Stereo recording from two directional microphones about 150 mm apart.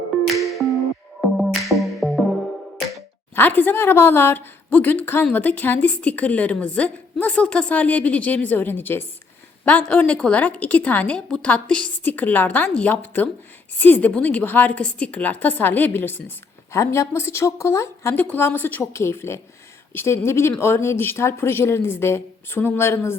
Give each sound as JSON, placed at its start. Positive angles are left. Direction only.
{"t": 0.6, "sound": "music", "side_deg": 0}
{"t": 3.3, "sound": "speech", "side_deg": 10}